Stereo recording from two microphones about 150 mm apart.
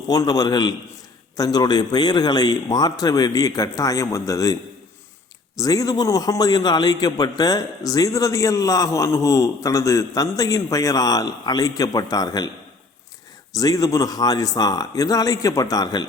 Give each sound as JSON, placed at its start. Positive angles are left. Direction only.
{"t": 0.1, "sound": "a man's voice", "side_deg": 25}
{"t": 5.5, "sound": "a man's voice", "side_deg": 25}
{"t": 13.5, "sound": "a man's voice", "side_deg": 25}